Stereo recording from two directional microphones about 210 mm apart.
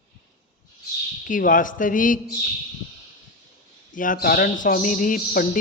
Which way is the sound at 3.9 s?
40° left (ahead or behind).